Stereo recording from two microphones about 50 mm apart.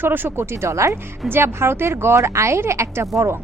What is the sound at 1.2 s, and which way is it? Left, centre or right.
A woman's voice, right.